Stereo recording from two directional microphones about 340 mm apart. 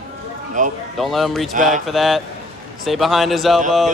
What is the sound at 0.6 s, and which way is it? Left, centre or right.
Speech, right.